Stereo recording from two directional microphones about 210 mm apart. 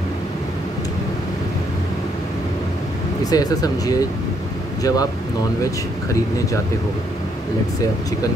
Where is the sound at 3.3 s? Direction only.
15° left (ahead or behind).